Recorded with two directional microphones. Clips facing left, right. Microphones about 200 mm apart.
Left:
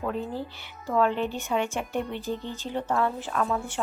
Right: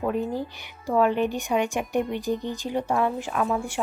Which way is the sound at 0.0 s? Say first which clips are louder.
Right 4 dB; 15° right (ahead or behind).